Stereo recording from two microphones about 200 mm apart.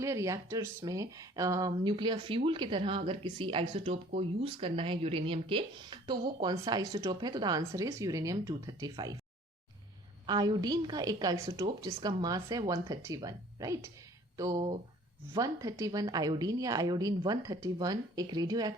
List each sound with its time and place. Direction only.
0.0 s speech: 15° right (ahead or behind)
10.2 s speech: 20° right (ahead or behind)